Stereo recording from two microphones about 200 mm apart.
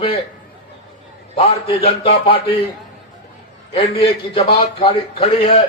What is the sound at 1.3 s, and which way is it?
A man's voice, 30° left (ahead or behind).